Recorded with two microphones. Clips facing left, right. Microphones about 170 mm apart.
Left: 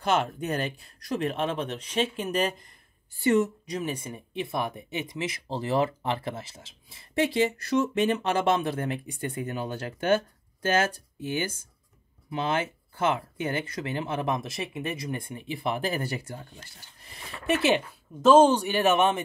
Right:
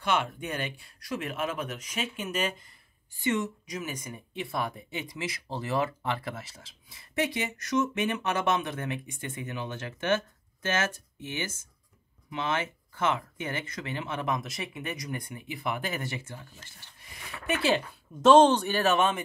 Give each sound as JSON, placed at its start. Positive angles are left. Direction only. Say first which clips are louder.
{"t": 0.0, "sound": "speech", "louder": "left 3 dB", "side_deg": 40}
{"t": 18.2, "sound": "speech", "louder": "left 1 dB", "side_deg": 5}